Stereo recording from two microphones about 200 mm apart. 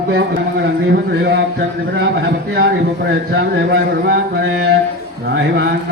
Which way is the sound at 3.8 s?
55° right (ahead or behind).